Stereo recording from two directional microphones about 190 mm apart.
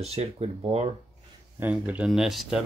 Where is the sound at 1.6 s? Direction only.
10° right (ahead or behind).